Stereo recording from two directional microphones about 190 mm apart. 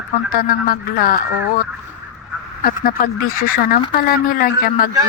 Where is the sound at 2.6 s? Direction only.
50° left (ahead or behind).